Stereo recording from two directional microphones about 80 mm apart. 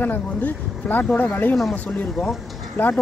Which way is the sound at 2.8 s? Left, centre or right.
Left.